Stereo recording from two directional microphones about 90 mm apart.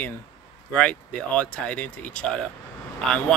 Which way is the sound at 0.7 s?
15° left (ahead or behind).